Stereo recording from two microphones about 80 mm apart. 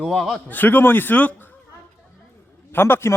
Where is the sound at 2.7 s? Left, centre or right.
Left.